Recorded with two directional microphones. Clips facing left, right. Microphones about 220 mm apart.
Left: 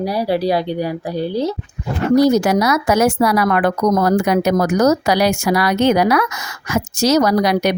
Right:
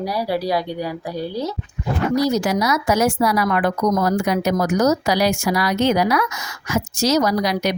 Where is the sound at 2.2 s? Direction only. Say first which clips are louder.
Left 7 dB; 60° left (ahead or behind).